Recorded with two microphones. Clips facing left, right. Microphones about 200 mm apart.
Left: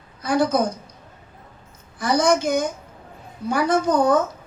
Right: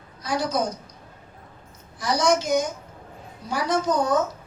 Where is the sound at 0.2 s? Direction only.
55° left (ahead or behind).